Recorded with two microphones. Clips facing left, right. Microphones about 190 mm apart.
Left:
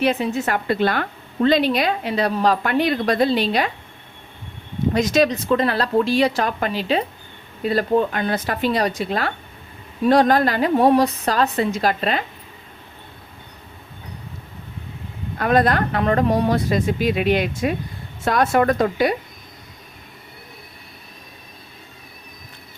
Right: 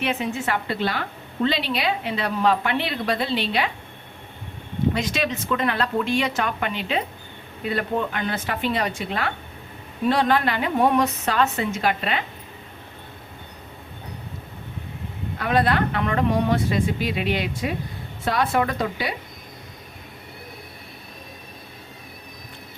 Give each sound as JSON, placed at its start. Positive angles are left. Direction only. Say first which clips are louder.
{"t": 0.0, "sound": "speech", "louder": "left 5 dB", "side_deg": 35}
{"t": 4.9, "sound": "a woman's voice", "louder": "left 8 dB", "side_deg": 40}
{"t": 15.4, "sound": "speech", "louder": "left 3 dB", "side_deg": 45}